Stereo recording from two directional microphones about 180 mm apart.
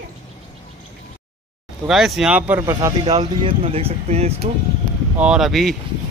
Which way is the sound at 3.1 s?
30° right (ahead or behind).